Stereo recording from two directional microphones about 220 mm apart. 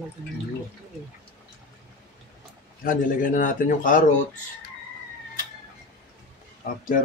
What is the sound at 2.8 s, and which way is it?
Speech, 40° left (ahead or behind).